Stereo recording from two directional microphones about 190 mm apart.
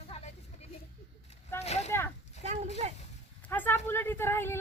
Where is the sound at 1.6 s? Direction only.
35° left (ahead or behind).